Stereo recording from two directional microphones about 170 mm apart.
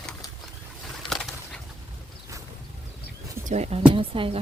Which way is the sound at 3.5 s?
40° right (ahead or behind).